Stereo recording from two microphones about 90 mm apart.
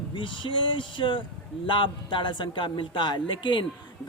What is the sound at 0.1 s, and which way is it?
A man's voice, 65° left (ahead or behind).